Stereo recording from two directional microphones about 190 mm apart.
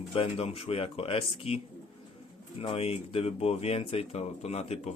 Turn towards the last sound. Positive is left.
turn(degrees=30)  # may be behind; listen again after turning